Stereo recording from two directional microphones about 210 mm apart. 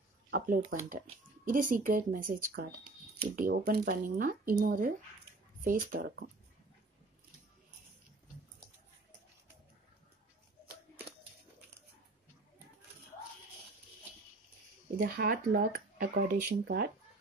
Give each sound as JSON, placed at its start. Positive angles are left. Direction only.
{"t": 0.3, "sound": "speech", "side_deg": -40}
{"t": 15.0, "sound": "speech", "side_deg": -45}